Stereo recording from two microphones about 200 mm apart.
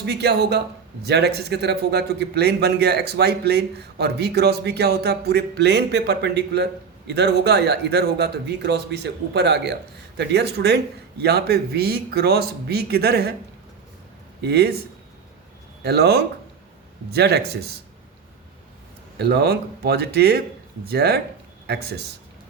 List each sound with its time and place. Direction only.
0.0 s speech: 55° right (ahead or behind)
14.4 s speech: 55° right (ahead or behind)
15.8 s speech: 55° right (ahead or behind)
19.2 s speech: 55° right (ahead or behind)